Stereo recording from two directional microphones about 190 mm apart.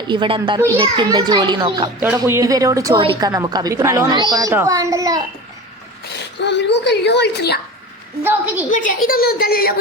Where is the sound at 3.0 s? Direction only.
30° right (ahead or behind).